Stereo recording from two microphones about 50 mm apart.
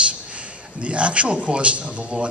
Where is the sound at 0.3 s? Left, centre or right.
Right.